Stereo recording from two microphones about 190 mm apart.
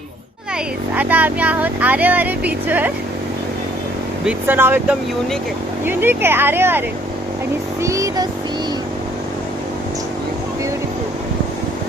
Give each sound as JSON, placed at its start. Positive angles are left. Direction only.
{"t": 0.9, "sound": "speech", "side_deg": -10}
{"t": 4.3, "sound": "speech", "side_deg": -10}